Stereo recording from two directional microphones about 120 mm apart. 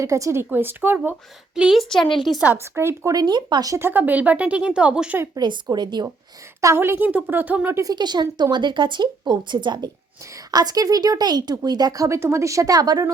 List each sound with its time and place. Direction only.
0.0 s speech: 25° right (ahead or behind)
1.5 s a woman's voice: 5° right (ahead or behind)
2.4 s speech: 15° right (ahead or behind); by 3.8 s 35° right (ahead or behind)
3.8 s speech: 15° right (ahead or behind)
5.2 s speech: 35° right (ahead or behind)
6.6 s speech: 25° right (ahead or behind)
7.9 s speech: 35° right (ahead or behind)